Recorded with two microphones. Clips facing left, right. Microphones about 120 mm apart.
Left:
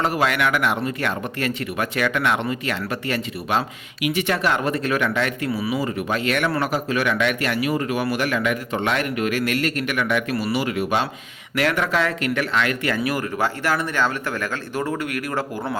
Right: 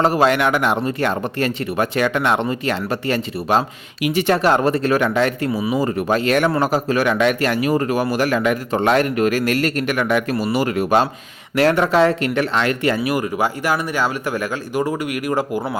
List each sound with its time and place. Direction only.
0.0 s speech: 30° right (ahead or behind)
11.5 s speech: 30° right (ahead or behind)
13.1 s speech: 15° right (ahead or behind)